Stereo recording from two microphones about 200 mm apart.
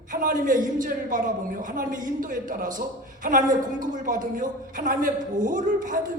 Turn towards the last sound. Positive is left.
turn(degrees=-40)  # may be behind; listen again after turning